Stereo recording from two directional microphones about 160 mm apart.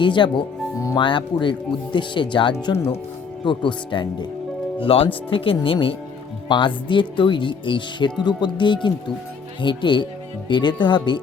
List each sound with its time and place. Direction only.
0.0 s speech: 30° left (ahead or behind)